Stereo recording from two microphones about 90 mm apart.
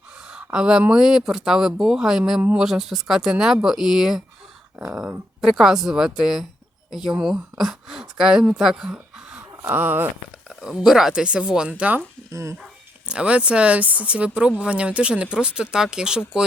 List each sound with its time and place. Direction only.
0.3 s speech: 10° right (ahead or behind)
9.6 s speech: 20° right (ahead or behind)
10.5 s speech: 5° right (ahead or behind)
12.3 s speech: 35° right (ahead or behind)
12.6 s speech: 10° right (ahead or behind)